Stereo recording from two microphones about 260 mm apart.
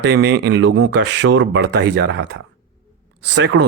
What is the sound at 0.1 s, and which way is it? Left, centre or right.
Speech, right.